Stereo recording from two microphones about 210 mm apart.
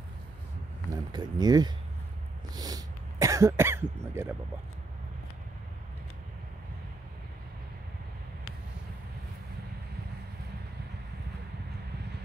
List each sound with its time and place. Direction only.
1.1 s speech: 20° right (ahead or behind)
2.5 s cough: 20° right (ahead or behind)